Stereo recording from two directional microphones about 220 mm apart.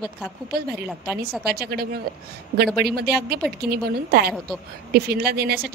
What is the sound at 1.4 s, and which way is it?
Speech, 45° right (ahead or behind).